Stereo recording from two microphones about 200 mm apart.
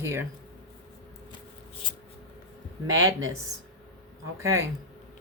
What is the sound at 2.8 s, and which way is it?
Speech, 15° right (ahead or behind).